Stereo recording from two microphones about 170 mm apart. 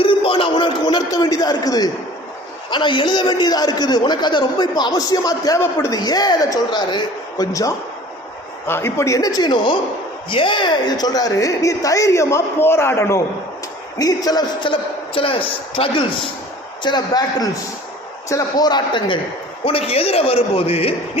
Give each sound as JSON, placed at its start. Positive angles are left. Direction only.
{"t": 0.0, "sound": "a man's voice", "side_deg": 30}